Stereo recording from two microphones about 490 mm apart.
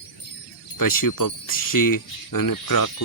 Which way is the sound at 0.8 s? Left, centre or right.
Left.